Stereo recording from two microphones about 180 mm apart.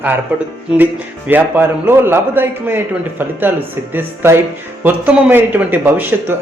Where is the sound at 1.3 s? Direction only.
10° right (ahead or behind).